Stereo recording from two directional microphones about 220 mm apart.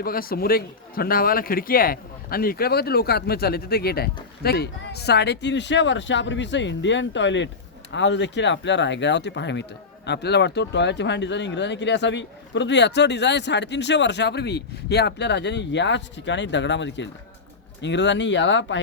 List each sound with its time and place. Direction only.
0.0 s speech: 40° left (ahead or behind)